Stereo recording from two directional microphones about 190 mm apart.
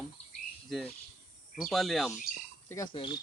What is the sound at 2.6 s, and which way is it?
Speech, 15° left (ahead or behind).